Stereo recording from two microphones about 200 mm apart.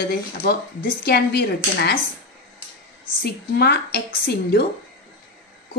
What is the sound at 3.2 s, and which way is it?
Speech, 55° left (ahead or behind).